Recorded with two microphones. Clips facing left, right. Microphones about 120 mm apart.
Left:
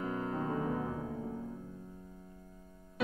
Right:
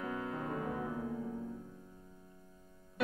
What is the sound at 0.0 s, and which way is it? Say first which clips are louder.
Piano: left 3 dB; 25° left (ahead or behind).